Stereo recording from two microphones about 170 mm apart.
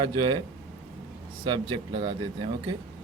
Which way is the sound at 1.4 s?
25° right (ahead or behind).